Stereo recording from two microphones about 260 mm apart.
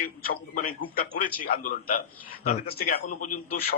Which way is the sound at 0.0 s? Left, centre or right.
Left.